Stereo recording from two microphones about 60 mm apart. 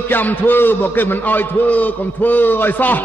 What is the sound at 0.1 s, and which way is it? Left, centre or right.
A man's voice, left.